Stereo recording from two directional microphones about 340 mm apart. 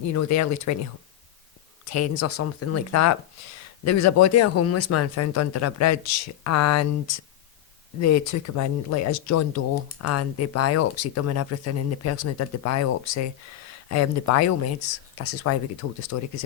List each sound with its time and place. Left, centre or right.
0.1 s speech: left
1.9 s speech: left
8.0 s speech: left